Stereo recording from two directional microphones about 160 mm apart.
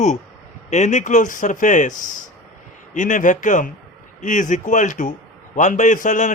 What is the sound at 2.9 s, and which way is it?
A man's voice, 50° left (ahead or behind).